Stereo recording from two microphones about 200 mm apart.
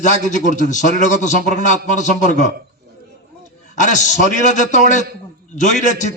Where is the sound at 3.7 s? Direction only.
40° left (ahead or behind).